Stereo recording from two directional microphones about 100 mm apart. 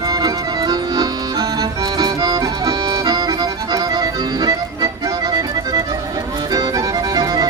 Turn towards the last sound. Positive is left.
turn(degrees=-40)  # may be behind; listen again after turning